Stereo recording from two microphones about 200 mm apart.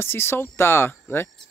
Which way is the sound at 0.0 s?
10° left (ahead or behind).